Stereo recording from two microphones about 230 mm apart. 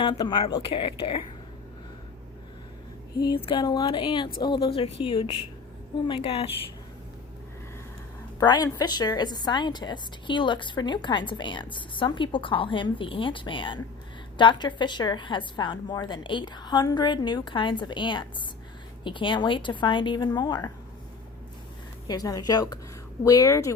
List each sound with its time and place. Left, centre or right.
0.0 s a woman's voice: centre
3.2 s a woman's voice: centre
8.4 s a woman's voice: centre
22.0 s speech: centre